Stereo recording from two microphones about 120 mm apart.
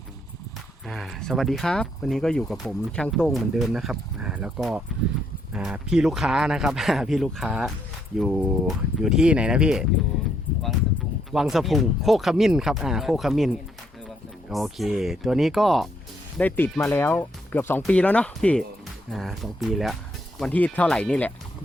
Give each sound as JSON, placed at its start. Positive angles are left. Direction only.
{"t": 0.9, "sound": "speech", "side_deg": 0}
{"t": 11.3, "sound": "speech", "side_deg": 0}
{"t": 16.4, "sound": "speech", "side_deg": 15}